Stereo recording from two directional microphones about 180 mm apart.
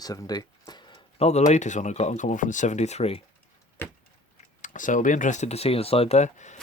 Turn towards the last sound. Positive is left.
turn(degrees=40)  # may be behind; listen again after turning